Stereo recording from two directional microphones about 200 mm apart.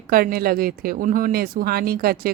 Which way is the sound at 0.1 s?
50° right (ahead or behind).